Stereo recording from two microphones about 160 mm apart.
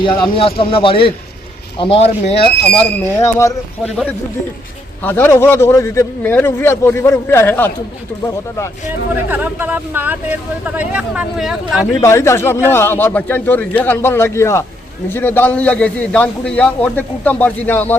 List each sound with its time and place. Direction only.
0.0 s a man's voice: 30° left (ahead or behind)
2.6 s a man's voice: 10° left (ahead or behind)
5.0 s a man's voice: 15° left (ahead or behind)
9.1 s speech: 10° right (ahead or behind)
11.9 s a man's voice: 20° left (ahead or behind)